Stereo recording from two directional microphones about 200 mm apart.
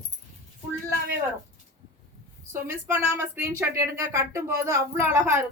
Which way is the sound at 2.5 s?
15° right (ahead or behind).